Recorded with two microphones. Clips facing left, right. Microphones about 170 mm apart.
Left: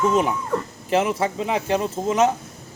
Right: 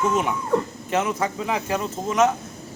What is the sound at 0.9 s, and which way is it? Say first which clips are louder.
Speech: left 3 dB; 30° left (ahead or behind).